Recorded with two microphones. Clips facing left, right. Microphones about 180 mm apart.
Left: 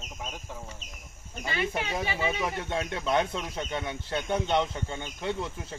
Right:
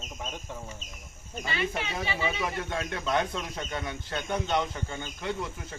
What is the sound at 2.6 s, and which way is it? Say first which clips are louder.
Speech: left 1 dB; 25° left (ahead or behind).